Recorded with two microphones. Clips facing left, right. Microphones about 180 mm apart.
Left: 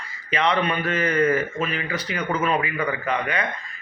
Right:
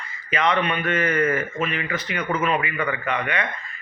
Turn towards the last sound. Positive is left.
turn(degrees=35)  # may be behind; listen again after turning